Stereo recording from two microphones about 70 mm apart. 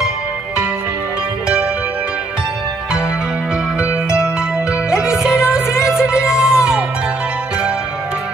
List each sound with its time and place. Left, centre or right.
3.8 s music: centre